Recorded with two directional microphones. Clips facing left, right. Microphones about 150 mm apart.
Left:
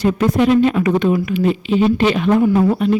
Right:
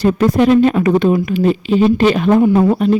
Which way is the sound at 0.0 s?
35° right (ahead or behind).